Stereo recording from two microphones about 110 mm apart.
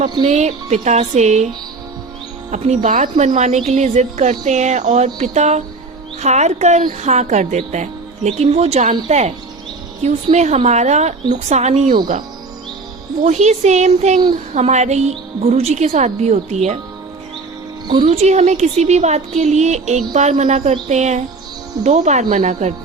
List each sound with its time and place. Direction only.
0.0 s music: 50° right (ahead or behind)
0.3 s a woman's voice: 90° right
3.2 s a woman's voice: 90° right
8.4 s a woman's voice: 75° right (ahead or behind); by 11.9 s 90° right
13.2 s a woman's voice: 90° right
17.8 s speech: 45° right (ahead or behind)
18.1 s a woman's voice: 80° right